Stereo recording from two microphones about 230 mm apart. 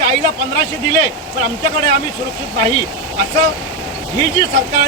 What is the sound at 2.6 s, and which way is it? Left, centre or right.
Speech, centre.